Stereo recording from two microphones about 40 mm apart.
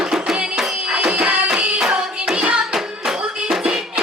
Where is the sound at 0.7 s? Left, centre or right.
Right.